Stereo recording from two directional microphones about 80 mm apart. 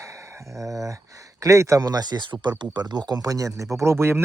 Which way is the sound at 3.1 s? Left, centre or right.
Right.